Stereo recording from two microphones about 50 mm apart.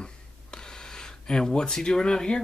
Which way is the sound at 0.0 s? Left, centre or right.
Centre.